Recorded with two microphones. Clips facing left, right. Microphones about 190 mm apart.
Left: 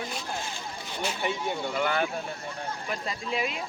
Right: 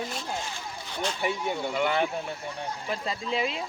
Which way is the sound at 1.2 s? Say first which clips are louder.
Right 1 dB; 5° right (ahead or behind).